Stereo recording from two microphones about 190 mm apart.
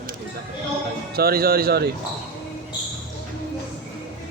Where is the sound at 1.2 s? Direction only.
50° right (ahead or behind).